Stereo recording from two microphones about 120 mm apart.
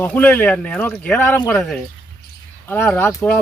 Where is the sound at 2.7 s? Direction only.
15° left (ahead or behind).